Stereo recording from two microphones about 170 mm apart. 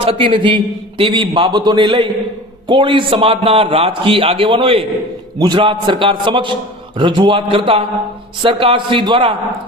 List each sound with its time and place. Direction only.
0.0 s a man's voice: 30° right (ahead or behind)